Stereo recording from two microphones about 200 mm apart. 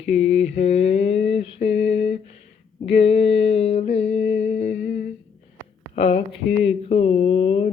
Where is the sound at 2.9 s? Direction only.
30° left (ahead or behind).